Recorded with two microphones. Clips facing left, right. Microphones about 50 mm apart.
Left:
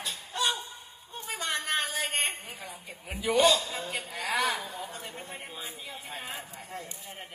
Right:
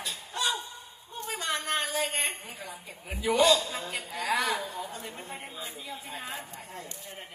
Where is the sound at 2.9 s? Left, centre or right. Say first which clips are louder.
Right 1 dB; left.